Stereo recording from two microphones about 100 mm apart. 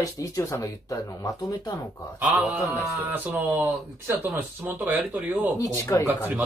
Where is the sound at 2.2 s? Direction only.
10° right (ahead or behind).